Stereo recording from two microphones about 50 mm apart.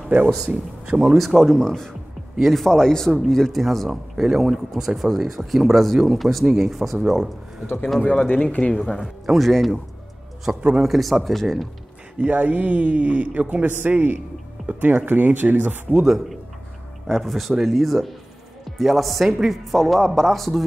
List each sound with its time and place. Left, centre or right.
0.5 s speech: centre
1.0 s speech: centre
1.6 s speech: centre
2.3 s speech: centre
2.6 s speech: centre
7.6 s a man's voice: left
8.1 s speech: left
9.0 s speech: centre
10.5 s speech: centre
10.8 s speech: centre
12.2 s a man's voice: right
16.0 s speech: centre